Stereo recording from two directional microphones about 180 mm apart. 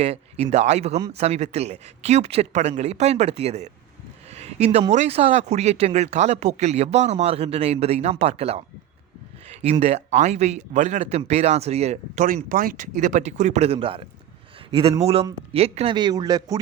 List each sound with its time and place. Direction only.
0.0 s speech: 35° right (ahead or behind)
9.5 s a sound: 35° right (ahead or behind)
9.8 s speech: 40° right (ahead or behind); by 16.6 s 20° right (ahead or behind)